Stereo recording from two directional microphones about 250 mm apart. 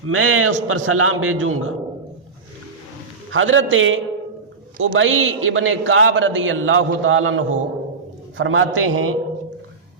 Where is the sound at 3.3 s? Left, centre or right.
Right.